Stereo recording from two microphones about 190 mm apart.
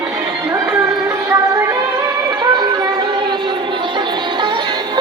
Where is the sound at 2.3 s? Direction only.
20° right (ahead or behind).